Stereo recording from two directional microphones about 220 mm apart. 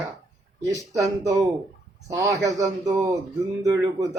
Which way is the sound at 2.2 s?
15° right (ahead or behind).